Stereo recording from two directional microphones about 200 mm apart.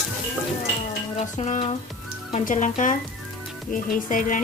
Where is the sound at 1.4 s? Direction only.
30° left (ahead or behind).